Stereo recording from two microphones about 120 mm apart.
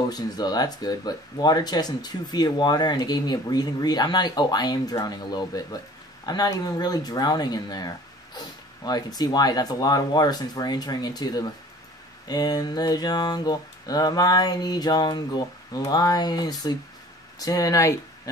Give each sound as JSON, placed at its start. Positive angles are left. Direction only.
{"t": 0.1, "sound": "speech", "side_deg": 35}